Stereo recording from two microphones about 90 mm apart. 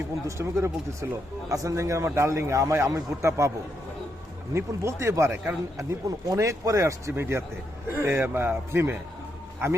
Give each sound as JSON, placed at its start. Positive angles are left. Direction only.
{"t": 0.3, "sound": "a man's voice", "side_deg": -30}
{"t": 4.5, "sound": "a man's voice", "side_deg": -30}